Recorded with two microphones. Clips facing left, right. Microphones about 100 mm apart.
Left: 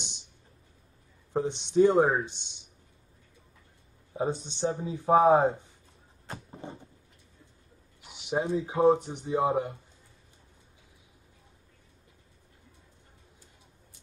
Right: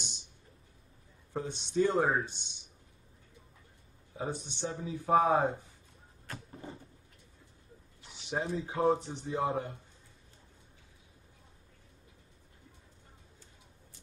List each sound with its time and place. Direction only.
1.3 s speech: 20° left (ahead or behind)
4.2 s speech: 25° left (ahead or behind)
6.2 s vehicle: 25° left (ahead or behind)
8.0 s a sound: 15° left (ahead or behind)
8.6 s speech: 20° left (ahead or behind)